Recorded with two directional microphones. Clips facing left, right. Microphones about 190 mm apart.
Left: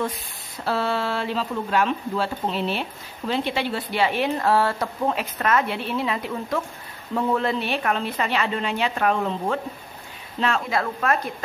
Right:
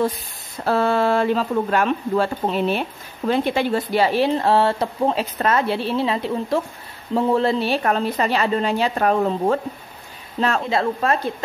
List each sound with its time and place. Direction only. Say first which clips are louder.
0.7 s speech: right 6 dB; 50° right (ahead or behind)
10.6 s speech: right 4 dB; 25° right (ahead or behind)